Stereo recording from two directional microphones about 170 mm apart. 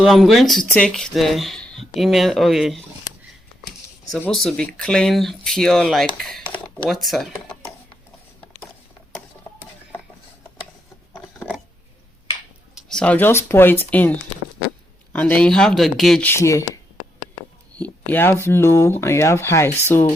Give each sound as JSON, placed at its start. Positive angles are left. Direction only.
{"t": 0.0, "sound": "speech", "side_deg": 0}
{"t": 4.3, "sound": "speech", "side_deg": 5}
{"t": 12.7, "sound": "speech", "side_deg": 5}
{"t": 16.3, "sound": "speech", "side_deg": 15}
{"t": 17.7, "sound": "speech", "side_deg": 10}